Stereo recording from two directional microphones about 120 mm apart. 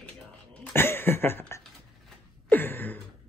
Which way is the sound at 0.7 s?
20° left (ahead or behind).